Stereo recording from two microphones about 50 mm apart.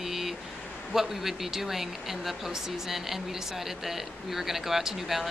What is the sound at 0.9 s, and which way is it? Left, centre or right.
Speech, centre.